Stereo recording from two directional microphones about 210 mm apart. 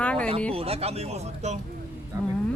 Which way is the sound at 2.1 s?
15° right (ahead or behind).